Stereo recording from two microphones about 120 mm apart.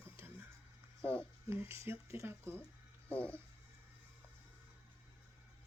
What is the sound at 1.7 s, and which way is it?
Child singing, 20° right (ahead or behind).